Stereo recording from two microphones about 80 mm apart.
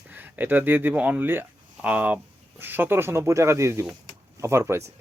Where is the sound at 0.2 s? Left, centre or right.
Right.